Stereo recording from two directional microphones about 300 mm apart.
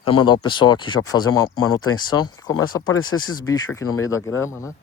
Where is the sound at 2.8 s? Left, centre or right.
Left.